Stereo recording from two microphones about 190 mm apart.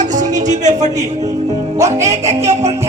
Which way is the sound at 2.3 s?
35° right (ahead or behind).